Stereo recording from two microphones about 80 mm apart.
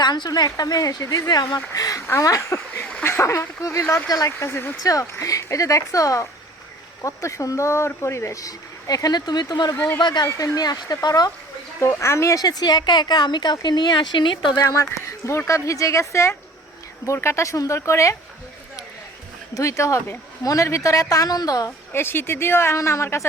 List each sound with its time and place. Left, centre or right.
0.0 s speech: left
4.8 s speech: left
10.2 s speech: left
11.8 s speech: left
15.3 s speech: left
19.5 s speech: left
21.9 s speech: left